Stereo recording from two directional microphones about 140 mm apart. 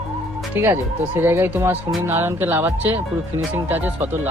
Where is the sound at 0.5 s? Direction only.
15° right (ahead or behind).